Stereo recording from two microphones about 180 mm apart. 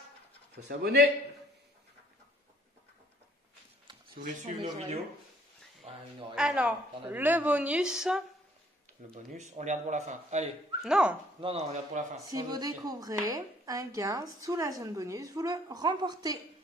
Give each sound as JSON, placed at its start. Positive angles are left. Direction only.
{"t": 0.7, "sound": "speech", "side_deg": -65}
{"t": 4.1, "sound": "a man's voice", "side_deg": -45}
{"t": 6.3, "sound": "a woman's voice", "side_deg": -5}
{"t": 9.1, "sound": "a man's voice", "side_deg": -40}
{"t": 10.8, "sound": "speech", "side_deg": -5}
{"t": 11.4, "sound": "a man's voice", "side_deg": -40}
{"t": 12.3, "sound": "speech", "side_deg": -20}